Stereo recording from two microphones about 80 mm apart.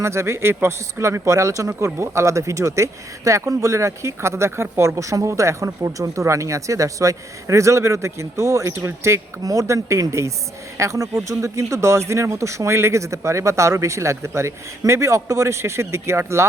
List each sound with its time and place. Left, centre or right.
0.0 s speech: right